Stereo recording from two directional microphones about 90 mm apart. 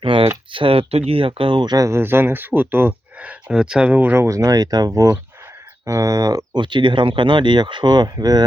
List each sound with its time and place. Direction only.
0.0 s a sound: 80° right
0.5 s speech: 80° right; by 1.8 s 55° right (ahead or behind)
1.8 s speech: 25° right (ahead or behind)
4.2 s speech: 35° right (ahead or behind)
4.9 s speech: 35° right (ahead or behind); by 8.4 s 50° right (ahead or behind)